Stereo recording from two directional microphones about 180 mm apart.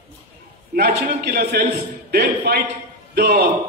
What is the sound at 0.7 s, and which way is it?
A man's voice, 55° right (ahead or behind).